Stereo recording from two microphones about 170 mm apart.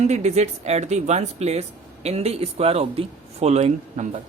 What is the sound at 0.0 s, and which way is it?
A woman's voice, 40° right (ahead or behind).